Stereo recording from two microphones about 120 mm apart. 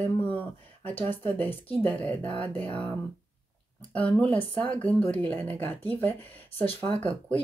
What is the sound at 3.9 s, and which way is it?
Speech, 10° left (ahead or behind).